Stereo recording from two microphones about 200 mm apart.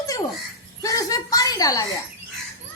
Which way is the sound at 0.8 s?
15° left (ahead or behind).